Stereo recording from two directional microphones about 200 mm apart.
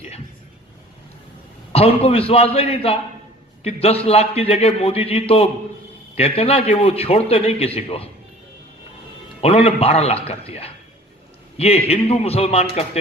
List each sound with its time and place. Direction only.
1.7 s a man's voice: 30° left (ahead or behind)
9.4 s a man's voice: 30° left (ahead or behind)